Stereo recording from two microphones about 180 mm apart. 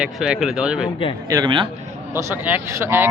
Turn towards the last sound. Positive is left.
turn(degrees=-15)  # may be behind; listen again after turning